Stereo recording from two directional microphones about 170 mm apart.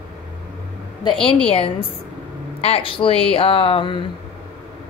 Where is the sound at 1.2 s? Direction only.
5° left (ahead or behind).